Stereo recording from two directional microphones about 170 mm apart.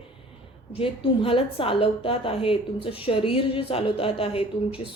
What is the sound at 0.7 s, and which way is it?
A woman's voice, 35° left (ahead or behind).